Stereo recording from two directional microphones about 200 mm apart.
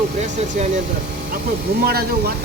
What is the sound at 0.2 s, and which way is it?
Speech, 35° right (ahead or behind).